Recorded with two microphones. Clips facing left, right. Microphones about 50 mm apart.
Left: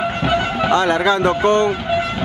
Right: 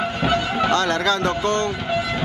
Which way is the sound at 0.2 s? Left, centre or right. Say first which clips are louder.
Left 1 dB; centre.